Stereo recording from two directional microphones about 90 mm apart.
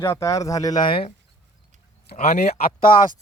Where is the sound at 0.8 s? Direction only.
80° left.